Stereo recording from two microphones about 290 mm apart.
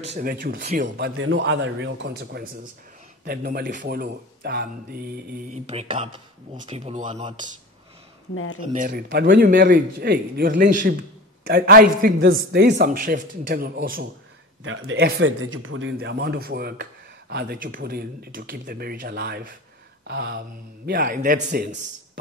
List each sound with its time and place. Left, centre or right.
0.0 s a man's voice: right
8.7 s speech: right
14.6 s a man's voice: right